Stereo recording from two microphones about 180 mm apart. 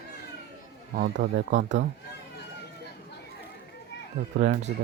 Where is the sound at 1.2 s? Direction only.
90° right.